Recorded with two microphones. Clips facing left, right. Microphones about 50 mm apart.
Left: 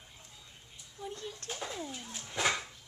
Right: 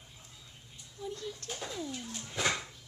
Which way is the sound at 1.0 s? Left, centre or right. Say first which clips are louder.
Right 2 dB; left.